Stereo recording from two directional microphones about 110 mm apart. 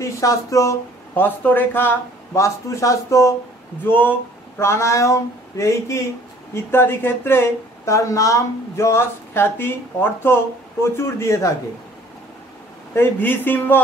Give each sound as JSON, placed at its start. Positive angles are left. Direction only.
{"t": 0.0, "sound": "speech", "side_deg": 30}
{"t": 1.1, "sound": "speech", "side_deg": 15}
{"t": 3.8, "sound": "speech", "side_deg": 15}
{"t": 12.9, "sound": "speech", "side_deg": 20}